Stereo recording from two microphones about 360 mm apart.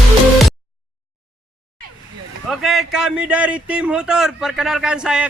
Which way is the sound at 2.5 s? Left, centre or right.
Centre.